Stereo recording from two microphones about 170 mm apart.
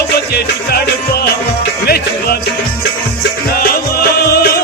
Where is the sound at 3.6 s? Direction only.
65° left (ahead or behind).